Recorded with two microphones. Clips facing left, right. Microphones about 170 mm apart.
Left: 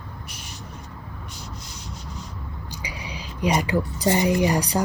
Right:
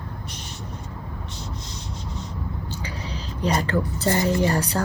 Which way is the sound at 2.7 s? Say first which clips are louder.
Right 3 dB; 15° left (ahead or behind).